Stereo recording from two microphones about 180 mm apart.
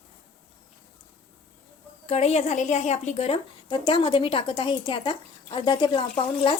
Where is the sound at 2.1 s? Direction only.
35° left (ahead or behind).